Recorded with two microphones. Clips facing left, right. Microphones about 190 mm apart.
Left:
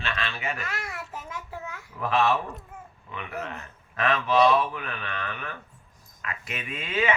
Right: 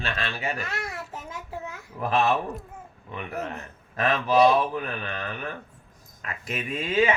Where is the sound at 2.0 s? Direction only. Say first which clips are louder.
Right 1 dB; 40° right (ahead or behind).